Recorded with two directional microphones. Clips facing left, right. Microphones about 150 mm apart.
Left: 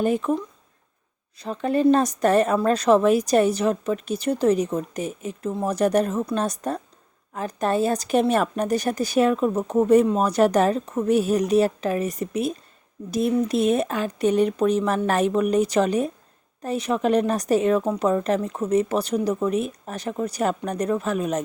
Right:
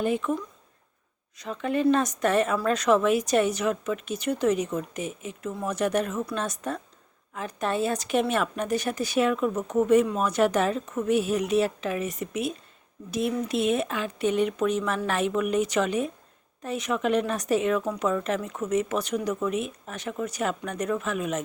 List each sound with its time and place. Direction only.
0.0 s a woman's voice: 40° left (ahead or behind)
1.4 s a woman's voice: 35° left (ahead or behind)